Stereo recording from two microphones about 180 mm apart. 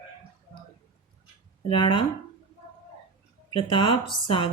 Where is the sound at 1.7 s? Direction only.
30° left (ahead or behind).